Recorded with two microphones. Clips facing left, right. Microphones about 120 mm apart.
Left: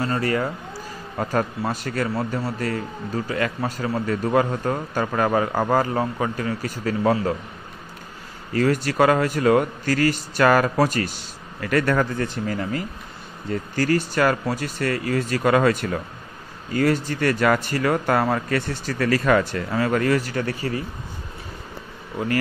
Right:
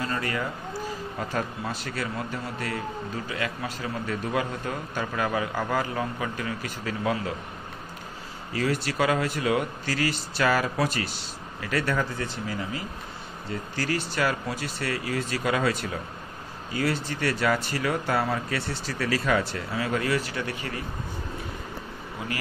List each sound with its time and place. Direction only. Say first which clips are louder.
0.0 s a man's voice: left 6 dB; 40° left (ahead or behind)
8.5 s a man's voice: left 7 dB; 45° left (ahead or behind)